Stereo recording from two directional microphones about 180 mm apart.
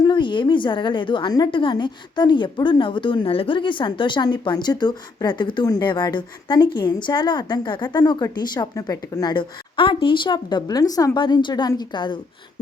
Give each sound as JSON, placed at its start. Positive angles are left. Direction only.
{"t": 0.0, "sound": "a woman's voice", "side_deg": 25}